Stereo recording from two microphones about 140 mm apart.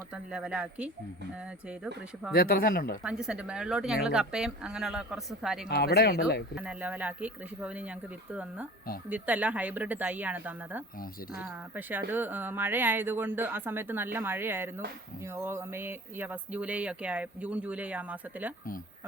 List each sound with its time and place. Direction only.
0.1 s speech: 5° right (ahead or behind)
2.3 s speech: 90° left
3.0 s a woman's voice: 5° right (ahead or behind)